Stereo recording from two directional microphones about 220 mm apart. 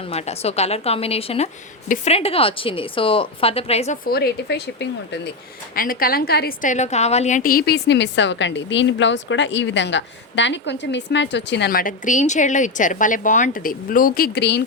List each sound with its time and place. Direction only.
0.0 s a woman's voice: 30° left (ahead or behind)
4.0 s a woman's voice: 45° left (ahead or behind)